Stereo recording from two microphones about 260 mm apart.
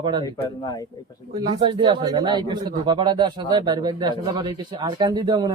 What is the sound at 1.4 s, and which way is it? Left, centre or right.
A man's voice, centre.